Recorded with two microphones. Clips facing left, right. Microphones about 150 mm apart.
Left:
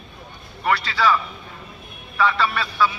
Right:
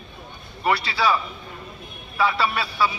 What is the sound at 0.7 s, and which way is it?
Speech, 10° right (ahead or behind).